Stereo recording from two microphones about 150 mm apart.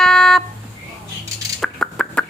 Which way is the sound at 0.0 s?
5° left (ahead or behind).